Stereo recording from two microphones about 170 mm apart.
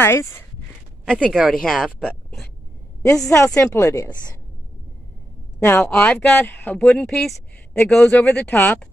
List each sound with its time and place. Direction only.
0.0 s speech: 15° left (ahead or behind); by 2.5 s centre (ahead or behind)
3.2 s a woman's voice: 20° left (ahead or behind)
5.6 s speech: 15° left (ahead or behind)